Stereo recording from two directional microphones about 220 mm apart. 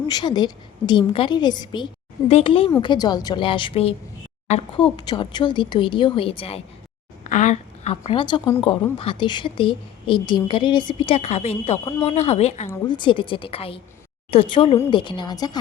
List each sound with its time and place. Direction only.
0.1 s a woman's voice: 20° left (ahead or behind)
4.9 s a woman's voice: 20° left (ahead or behind)
12.6 s a woman's voice: 15° left (ahead or behind)